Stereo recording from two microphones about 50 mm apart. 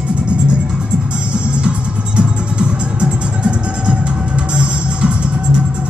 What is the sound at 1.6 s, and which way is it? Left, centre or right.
Music, centre.